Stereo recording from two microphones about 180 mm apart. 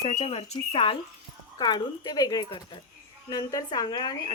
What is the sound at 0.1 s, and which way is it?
Speech, 35° left (ahead or behind).